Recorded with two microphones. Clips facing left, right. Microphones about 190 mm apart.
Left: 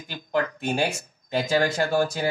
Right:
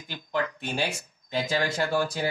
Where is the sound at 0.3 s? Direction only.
45° left (ahead or behind).